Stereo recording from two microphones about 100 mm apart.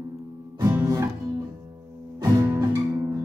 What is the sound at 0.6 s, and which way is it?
Music, 25° right (ahead or behind).